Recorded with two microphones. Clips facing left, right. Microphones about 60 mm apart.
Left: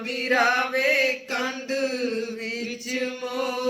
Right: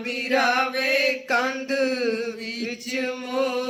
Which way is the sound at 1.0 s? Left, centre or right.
Right.